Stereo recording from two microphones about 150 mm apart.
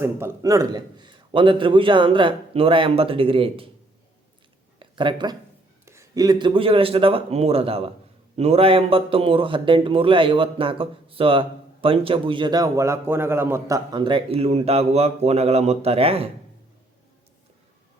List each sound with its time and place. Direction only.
0.0 s a man's voice: 20° right (ahead or behind); by 3.7 s 35° right (ahead or behind)
4.8 s speech: 30° right (ahead or behind)
5.8 s a man's voice: 20° right (ahead or behind); by 16.3 s 40° right (ahead or behind)